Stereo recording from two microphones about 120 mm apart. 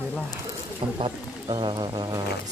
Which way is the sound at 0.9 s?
45° right (ahead or behind).